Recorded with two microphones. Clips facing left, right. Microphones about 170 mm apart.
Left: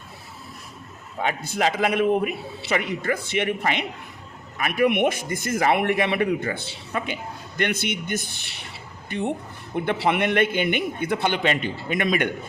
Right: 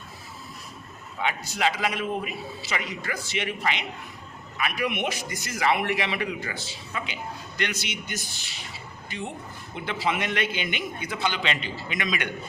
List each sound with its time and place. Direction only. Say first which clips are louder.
1.2 s a man's voice: left 3 dB; 50° left (ahead or behind)